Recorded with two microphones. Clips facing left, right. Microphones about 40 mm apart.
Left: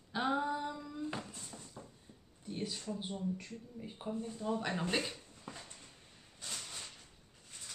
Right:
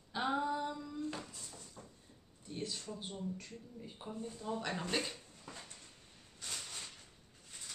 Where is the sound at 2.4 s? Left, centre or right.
Centre.